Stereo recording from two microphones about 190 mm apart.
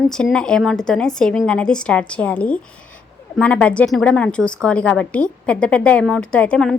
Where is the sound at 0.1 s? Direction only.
5° left (ahead or behind).